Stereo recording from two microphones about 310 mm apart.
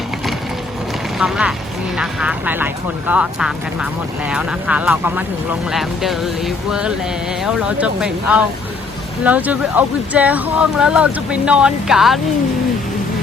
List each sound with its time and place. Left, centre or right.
1.2 s speech: centre